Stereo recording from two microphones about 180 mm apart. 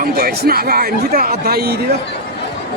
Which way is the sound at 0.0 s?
60° right (ahead or behind).